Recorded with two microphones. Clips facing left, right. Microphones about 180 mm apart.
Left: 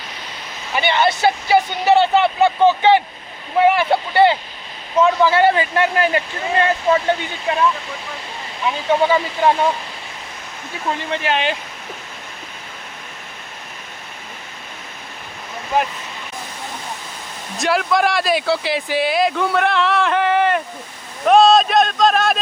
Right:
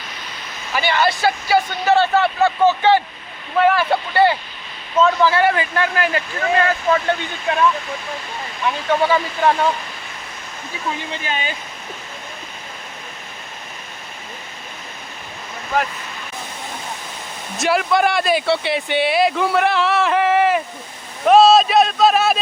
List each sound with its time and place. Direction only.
0.7 s speech: 25° left (ahead or behind)
8.6 s speech: 15° left (ahead or behind)
11.3 s speech: 80° left
17.6 s speech: centre (ahead or behind)